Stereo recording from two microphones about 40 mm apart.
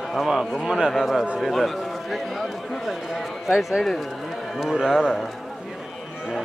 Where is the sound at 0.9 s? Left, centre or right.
Centre.